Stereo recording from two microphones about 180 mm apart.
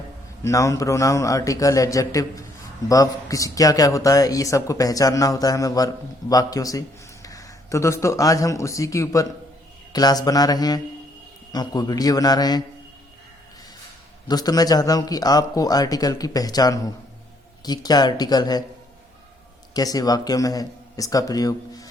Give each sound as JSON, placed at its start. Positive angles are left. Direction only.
{"t": 0.4, "sound": "a man's voice", "side_deg": 15}
{"t": 14.3, "sound": "a man's voice", "side_deg": 20}
{"t": 19.7, "sound": "a man's voice", "side_deg": 20}